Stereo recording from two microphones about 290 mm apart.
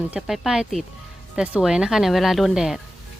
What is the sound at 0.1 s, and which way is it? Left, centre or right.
Speech, centre.